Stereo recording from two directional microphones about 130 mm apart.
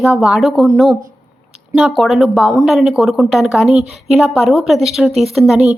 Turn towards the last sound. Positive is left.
turn(degrees=0)  # may be behind; listen again after turning